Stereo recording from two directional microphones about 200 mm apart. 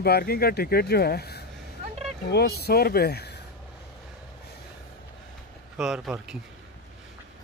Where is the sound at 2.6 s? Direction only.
50° left (ahead or behind).